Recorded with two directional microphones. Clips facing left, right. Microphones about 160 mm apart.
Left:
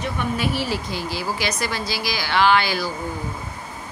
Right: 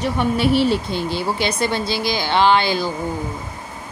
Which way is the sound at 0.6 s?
25° right (ahead or behind).